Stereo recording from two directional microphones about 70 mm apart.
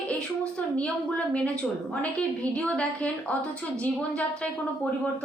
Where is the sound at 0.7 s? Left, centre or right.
Centre.